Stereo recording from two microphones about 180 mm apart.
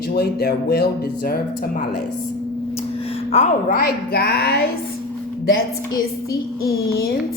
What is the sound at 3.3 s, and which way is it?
Speech, 35° left (ahead or behind).